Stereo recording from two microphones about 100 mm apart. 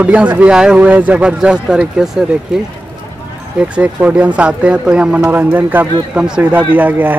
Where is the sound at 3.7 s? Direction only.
15° right (ahead or behind).